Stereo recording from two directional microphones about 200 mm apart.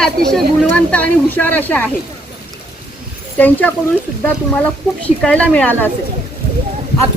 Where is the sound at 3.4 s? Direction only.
10° left (ahead or behind).